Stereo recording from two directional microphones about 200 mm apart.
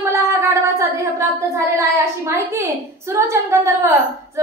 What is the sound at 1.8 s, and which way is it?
A woman's voice, 15° right (ahead or behind).